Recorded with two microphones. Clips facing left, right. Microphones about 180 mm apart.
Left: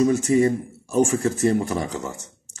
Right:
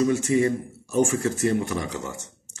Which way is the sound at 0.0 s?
40° left (ahead or behind).